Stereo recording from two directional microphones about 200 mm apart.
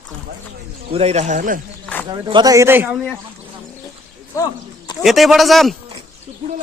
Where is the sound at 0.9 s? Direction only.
30° right (ahead or behind).